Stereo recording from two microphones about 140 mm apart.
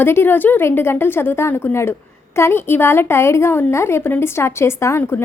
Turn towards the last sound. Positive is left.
turn(degrees=20)  # may be behind; listen again after turning